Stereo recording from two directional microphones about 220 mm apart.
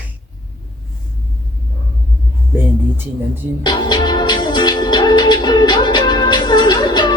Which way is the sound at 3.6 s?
20° left (ahead or behind).